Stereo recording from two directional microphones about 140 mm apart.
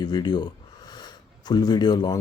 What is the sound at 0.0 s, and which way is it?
Speech, 30° left (ahead or behind).